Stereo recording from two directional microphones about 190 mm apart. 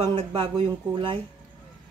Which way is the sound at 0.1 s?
25° right (ahead or behind).